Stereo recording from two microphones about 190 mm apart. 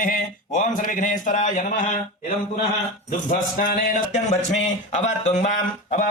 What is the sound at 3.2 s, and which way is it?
Speech, 45° left (ahead or behind).